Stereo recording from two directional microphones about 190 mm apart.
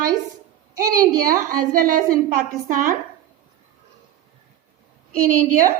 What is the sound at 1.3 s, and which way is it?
A woman's voice, 45° right (ahead or behind).